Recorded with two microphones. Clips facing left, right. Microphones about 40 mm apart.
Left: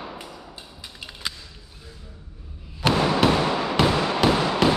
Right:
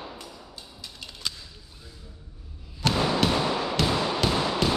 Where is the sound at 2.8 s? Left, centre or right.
Centre.